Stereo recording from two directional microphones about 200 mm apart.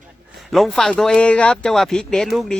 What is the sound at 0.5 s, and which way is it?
Speech, centre (ahead or behind).